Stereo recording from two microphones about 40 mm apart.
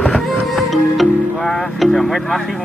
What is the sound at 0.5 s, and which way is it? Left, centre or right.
Music, centre.